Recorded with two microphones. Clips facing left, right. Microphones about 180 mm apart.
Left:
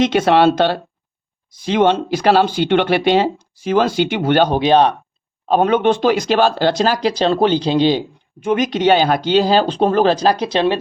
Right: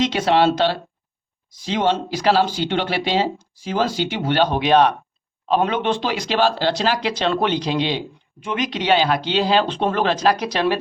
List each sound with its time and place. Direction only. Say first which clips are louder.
0.0 s speech: left 4 dB; 55° left (ahead or behind); by 4.9 s 30° left (ahead or behind)
5.5 s speech: left 5 dB; 45° left (ahead or behind); by 10.8 s 25° left (ahead or behind)